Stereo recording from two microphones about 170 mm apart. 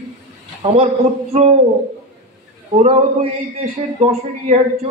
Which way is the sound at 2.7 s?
40° right (ahead or behind).